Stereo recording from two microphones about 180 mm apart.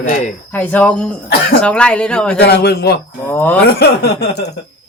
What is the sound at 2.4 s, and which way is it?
Speech, 65° left (ahead or behind).